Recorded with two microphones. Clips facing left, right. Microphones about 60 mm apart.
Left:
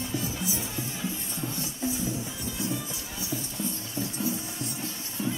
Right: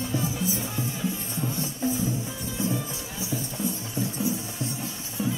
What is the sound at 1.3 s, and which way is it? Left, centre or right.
Music, right.